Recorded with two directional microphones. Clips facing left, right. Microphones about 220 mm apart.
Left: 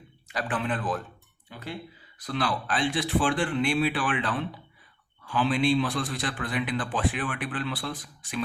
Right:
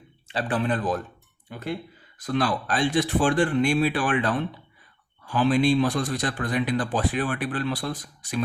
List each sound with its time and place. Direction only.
0.3 s a man's voice: 35° right (ahead or behind)